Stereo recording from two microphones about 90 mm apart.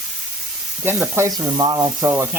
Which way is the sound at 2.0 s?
25° right (ahead or behind).